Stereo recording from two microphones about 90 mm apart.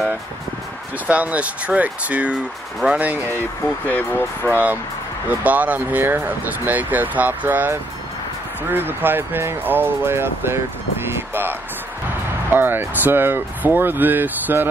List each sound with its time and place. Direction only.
1.0 s speech: 15° right (ahead or behind)
3.8 s speech: 20° left (ahead or behind)
5.3 s speech: 15° right (ahead or behind)